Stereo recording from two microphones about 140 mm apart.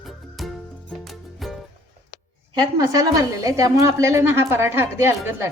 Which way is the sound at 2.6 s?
25° right (ahead or behind).